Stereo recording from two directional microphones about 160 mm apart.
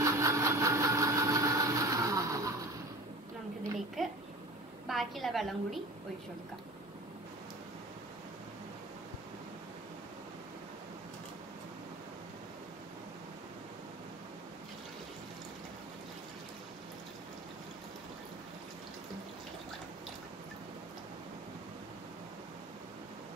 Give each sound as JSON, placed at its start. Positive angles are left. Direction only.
{"t": 0.0, "sound": "engine", "side_deg": -20}
{"t": 4.0, "sound": "a sound", "side_deg": 0}
{"t": 4.8, "sound": "a woman's voice", "side_deg": 0}